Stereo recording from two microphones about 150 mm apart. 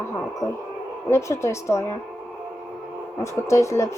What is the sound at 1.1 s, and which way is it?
Speech, 20° left (ahead or behind).